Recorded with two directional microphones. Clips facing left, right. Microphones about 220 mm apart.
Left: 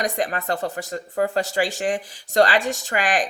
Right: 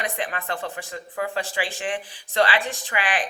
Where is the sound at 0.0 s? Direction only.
40° left (ahead or behind).